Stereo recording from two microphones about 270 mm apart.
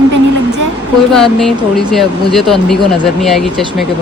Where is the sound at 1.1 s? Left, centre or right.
Centre.